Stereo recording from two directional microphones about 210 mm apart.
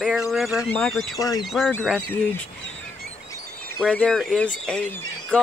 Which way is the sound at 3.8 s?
Centre (ahead or behind).